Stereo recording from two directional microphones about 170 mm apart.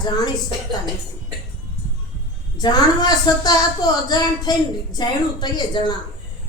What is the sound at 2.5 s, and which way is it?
A woman's voice, 25° left (ahead or behind).